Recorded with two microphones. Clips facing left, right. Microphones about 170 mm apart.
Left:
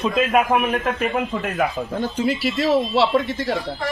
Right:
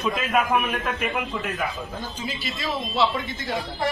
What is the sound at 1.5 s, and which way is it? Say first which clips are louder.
A man's voice: left 8 dB; 65° left (ahead or behind).